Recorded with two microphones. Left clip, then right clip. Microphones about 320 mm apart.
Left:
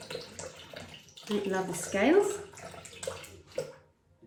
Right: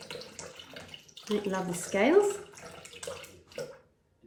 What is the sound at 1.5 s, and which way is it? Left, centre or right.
Speech, right.